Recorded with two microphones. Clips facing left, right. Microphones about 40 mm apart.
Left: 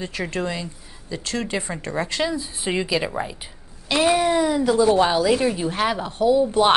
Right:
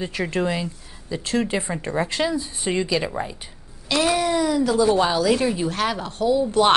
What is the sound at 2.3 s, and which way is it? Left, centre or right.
Speech, centre.